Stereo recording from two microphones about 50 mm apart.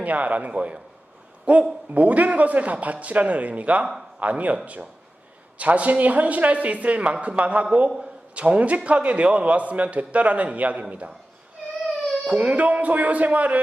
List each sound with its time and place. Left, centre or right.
0.0 s a man's voice: right
12.2 s a man's voice: right